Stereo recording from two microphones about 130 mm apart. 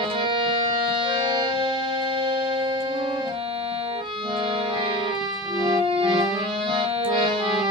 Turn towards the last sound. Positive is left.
turn(degrees=-40)  # may be behind; listen again after turning